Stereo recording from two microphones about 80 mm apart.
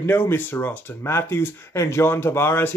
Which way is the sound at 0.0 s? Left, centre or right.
Left.